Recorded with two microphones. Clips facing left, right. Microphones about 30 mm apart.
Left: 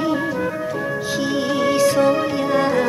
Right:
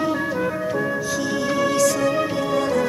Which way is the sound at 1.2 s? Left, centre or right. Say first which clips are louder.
Left 3 dB; left.